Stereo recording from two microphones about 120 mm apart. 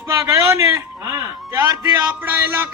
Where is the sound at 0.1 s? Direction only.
25° right (ahead or behind).